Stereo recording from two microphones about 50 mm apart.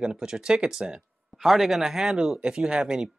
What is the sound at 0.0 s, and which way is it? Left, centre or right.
Speech, centre.